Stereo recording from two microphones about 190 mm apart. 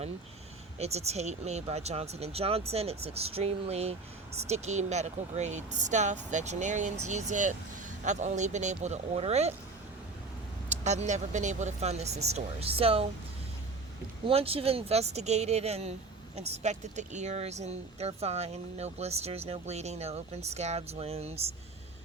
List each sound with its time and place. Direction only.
0.8 s speech: 35° right (ahead or behind)
10.7 s speech: 35° right (ahead or behind)
14.3 s speech: 30° right (ahead or behind)